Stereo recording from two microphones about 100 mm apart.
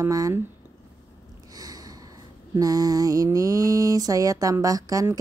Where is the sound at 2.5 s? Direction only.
40° right (ahead or behind).